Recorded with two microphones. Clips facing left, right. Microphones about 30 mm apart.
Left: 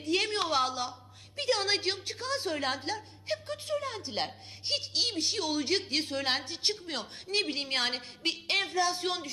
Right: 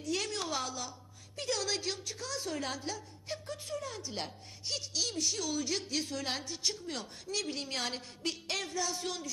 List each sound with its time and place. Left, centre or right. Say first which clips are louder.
0.0 s a woman's voice: left 6 dB; left